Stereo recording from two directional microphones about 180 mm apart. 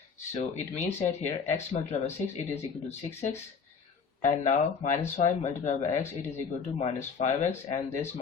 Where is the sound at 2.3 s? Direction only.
40° left (ahead or behind).